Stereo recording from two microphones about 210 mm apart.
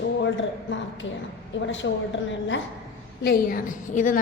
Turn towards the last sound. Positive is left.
turn(degrees=40)  # may be behind; listen again after turning